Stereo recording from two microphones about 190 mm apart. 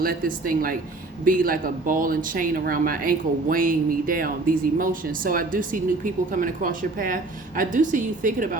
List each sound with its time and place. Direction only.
0.0 s speech: 50° right (ahead or behind)